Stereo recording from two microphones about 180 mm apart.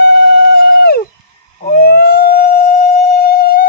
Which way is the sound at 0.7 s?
60° left (ahead or behind).